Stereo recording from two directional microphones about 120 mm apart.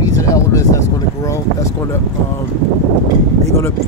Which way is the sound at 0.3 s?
25° left (ahead or behind).